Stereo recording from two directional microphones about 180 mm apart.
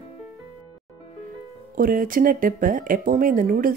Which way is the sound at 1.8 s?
50° right (ahead or behind).